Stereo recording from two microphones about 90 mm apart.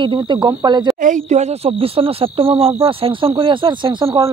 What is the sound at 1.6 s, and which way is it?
Speech, 90° right.